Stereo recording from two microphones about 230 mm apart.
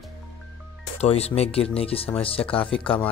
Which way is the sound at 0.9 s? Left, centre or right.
Left.